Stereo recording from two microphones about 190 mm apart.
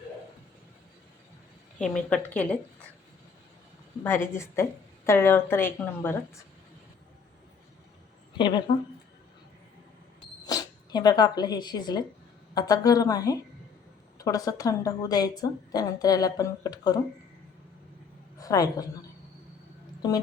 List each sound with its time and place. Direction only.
1.8 s a woman's voice: 5° left (ahead or behind)
4.0 s a woman's voice: 10° left (ahead or behind)
8.4 s a woman's voice: 25° left (ahead or behind)
10.2 s camera: 20° left (ahead or behind)
12.5 s a woman's voice: 20° left (ahead or behind)
18.3 s a woman's voice: 20° left (ahead or behind)
20.0 s speech: 20° left (ahead or behind)